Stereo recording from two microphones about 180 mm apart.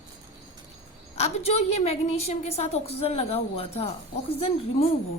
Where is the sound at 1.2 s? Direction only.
35° left (ahead or behind).